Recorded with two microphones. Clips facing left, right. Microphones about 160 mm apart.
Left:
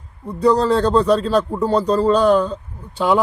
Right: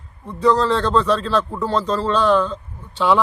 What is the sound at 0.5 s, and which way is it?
Speech, 10° left (ahead or behind).